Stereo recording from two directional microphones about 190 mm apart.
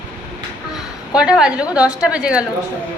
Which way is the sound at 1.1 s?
5° right (ahead or behind).